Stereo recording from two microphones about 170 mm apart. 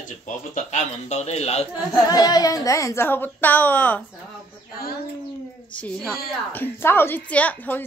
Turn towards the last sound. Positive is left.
turn(degrees=10)  # may be behind; listen again after turning